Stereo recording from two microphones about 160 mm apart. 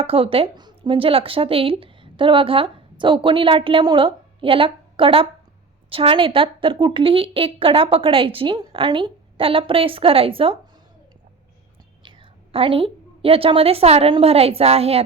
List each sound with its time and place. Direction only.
0.0 s a woman's voice: 35° right (ahead or behind)
12.0 s a woman's voice: 35° right (ahead or behind)